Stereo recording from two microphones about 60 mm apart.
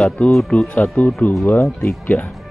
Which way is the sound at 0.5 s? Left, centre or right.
Left.